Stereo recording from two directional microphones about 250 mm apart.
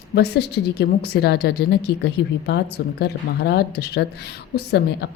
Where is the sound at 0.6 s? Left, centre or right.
Left.